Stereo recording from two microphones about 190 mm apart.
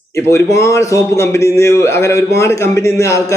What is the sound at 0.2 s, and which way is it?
A man's voice, 15° left (ahead or behind).